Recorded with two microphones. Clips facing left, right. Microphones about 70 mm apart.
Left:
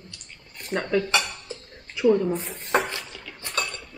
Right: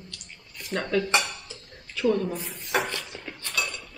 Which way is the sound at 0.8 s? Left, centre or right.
Centre.